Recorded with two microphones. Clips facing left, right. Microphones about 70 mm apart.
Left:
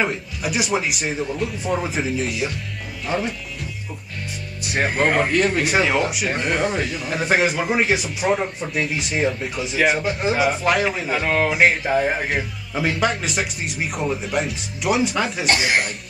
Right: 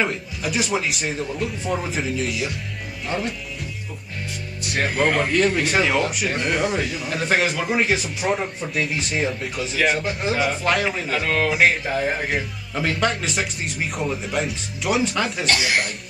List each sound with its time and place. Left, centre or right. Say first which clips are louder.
0.0 s speech: left 1 dB; centre
4.7 s speech: left 1 dB; centre
8.3 s speech: left 3 dB; centre
9.6 s speech: left 1 dB; centre
15.4 s speech: left 3 dB; left